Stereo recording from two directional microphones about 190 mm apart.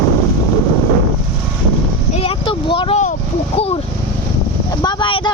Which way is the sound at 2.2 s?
30° left (ahead or behind).